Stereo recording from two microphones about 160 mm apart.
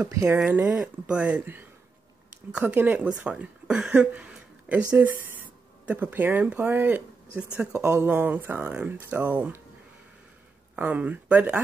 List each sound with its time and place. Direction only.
0.0 s speech: 15° right (ahead or behind)
0.4 s speech: 5° right (ahead or behind)
10.8 s speech: 10° right (ahead or behind)